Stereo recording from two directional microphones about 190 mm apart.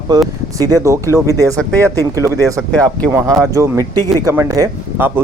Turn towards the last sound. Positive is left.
turn(degrees=-15)  # may be behind; listen again after turning